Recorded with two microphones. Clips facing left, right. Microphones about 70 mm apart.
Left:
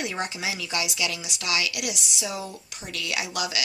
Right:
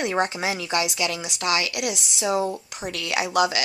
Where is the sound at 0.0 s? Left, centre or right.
Right.